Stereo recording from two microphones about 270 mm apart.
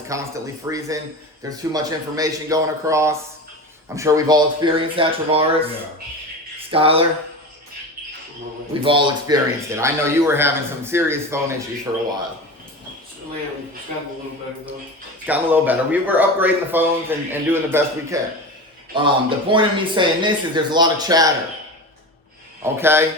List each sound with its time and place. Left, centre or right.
0.1 s speech: centre
6.7 s speech: right
8.8 s speech: centre
15.3 s speech: centre
22.6 s speech: centre